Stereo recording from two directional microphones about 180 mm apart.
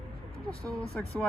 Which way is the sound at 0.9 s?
5° left (ahead or behind).